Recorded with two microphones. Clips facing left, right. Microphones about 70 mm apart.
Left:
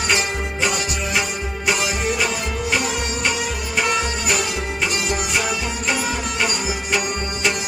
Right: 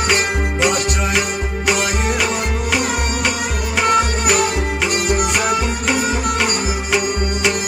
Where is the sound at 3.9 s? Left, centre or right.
Right.